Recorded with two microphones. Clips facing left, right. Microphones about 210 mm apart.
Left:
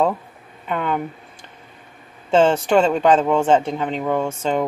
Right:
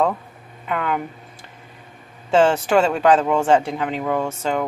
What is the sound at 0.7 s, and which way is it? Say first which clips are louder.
Speech: left 1 dB; centre (ahead or behind).